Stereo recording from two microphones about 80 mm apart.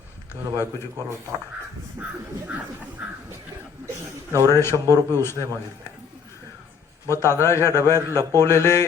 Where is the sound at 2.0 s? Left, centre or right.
Right.